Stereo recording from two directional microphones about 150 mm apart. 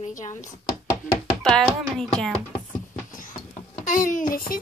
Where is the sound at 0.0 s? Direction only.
55° left (ahead or behind).